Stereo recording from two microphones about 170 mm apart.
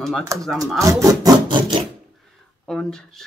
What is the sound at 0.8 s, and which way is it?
Speech, 20° right (ahead or behind).